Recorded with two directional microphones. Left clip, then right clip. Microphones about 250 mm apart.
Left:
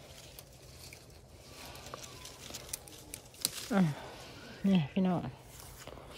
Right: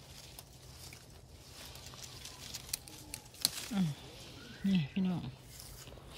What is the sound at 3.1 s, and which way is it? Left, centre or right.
Crumpling, centre.